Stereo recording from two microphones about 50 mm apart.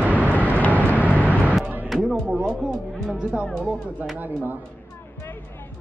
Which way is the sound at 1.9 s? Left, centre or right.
Centre.